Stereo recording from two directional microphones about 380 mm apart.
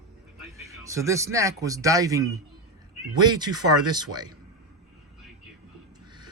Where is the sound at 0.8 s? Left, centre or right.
Centre.